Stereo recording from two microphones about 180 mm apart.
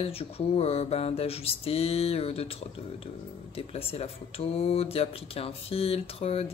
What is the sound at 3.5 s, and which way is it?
Speech, 35° left (ahead or behind).